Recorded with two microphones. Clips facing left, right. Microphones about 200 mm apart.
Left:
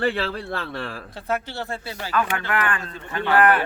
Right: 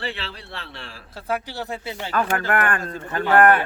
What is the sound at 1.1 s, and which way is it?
Speech, 5° right (ahead or behind).